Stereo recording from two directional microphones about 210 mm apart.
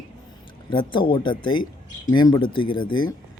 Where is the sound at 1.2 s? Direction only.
20° left (ahead or behind).